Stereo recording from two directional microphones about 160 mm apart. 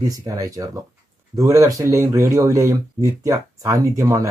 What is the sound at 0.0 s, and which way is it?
Speech, 20° right (ahead or behind).